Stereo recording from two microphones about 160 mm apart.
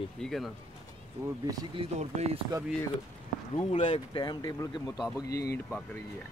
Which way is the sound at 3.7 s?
40° left (ahead or behind).